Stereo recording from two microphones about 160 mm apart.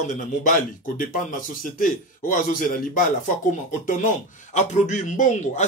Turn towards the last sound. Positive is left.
turn(degrees=50)  # may be behind; listen again after turning